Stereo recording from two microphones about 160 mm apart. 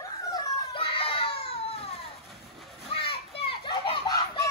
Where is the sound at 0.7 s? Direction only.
35° left (ahead or behind).